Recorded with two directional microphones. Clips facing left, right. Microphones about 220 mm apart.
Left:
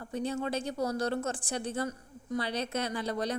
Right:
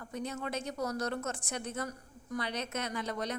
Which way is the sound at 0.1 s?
30° left (ahead or behind).